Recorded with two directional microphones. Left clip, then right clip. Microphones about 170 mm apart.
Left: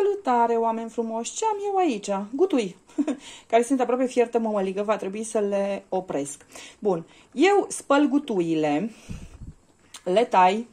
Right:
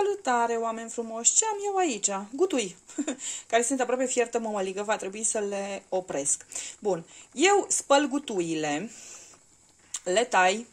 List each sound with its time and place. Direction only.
0.0 s speech: centre (ahead or behind)
9.9 s speech: centre (ahead or behind)